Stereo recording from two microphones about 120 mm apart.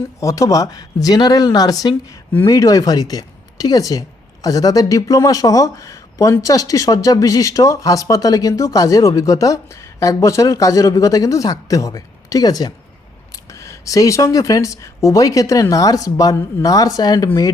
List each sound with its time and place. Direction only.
0.2 s speech: 25° left (ahead or behind)